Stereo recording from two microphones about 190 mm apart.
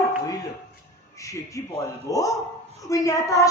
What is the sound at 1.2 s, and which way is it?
Speech, 15° left (ahead or behind).